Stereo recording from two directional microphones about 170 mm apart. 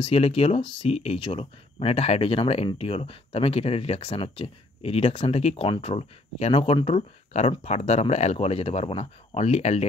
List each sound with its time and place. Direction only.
0.0 s speech: 35° left (ahead or behind)